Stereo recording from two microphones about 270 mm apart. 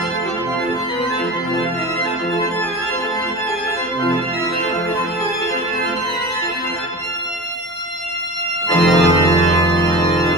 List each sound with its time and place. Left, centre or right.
8.7 s organ: centre